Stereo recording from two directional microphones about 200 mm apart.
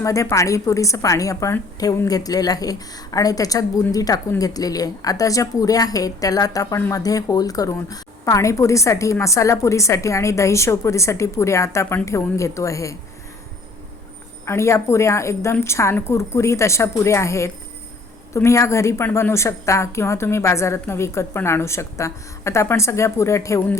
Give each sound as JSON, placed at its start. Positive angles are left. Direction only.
{"t": 0.0, "sound": "a woman's voice", "side_deg": 15}
{"t": 14.4, "sound": "a woman's voice", "side_deg": 15}